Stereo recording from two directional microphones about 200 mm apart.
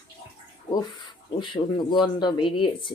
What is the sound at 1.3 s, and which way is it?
Speech, 20° left (ahead or behind).